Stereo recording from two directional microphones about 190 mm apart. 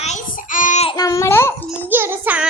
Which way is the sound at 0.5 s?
40° left (ahead or behind).